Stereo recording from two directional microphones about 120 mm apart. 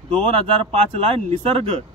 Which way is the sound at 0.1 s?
50° right (ahead or behind).